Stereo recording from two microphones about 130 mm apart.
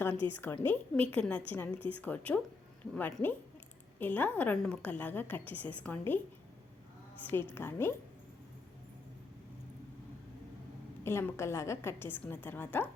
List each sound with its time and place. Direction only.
0.4 s a woman's voice: 15° left (ahead or behind)
7.2 s a woman's voice: 15° left (ahead or behind)
11.0 s a woman's voice: 20° left (ahead or behind)